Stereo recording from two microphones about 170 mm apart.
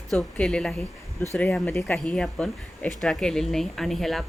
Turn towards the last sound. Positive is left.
turn(degrees=0)  # may be behind; listen again after turning